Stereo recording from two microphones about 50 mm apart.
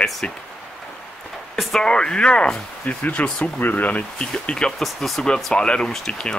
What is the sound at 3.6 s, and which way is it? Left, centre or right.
Speech, left.